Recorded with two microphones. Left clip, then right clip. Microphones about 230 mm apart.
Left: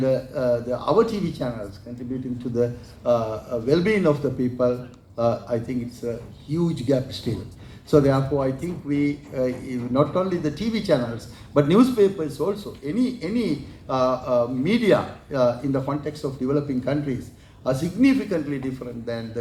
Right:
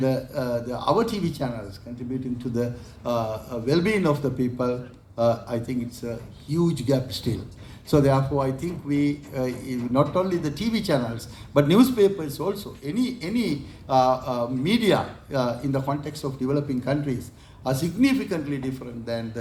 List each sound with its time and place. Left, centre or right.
0.0 s a man's voice: right
2.6 s a man's voice: right